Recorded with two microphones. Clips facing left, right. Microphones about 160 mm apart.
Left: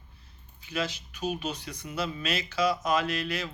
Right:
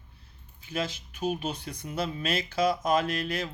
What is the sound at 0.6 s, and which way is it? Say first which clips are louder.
Speech: even; 50° right (ahead or behind).